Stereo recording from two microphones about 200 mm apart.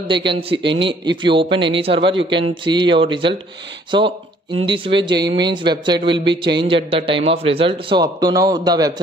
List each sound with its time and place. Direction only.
0.0 s a man's voice: 25° right (ahead or behind)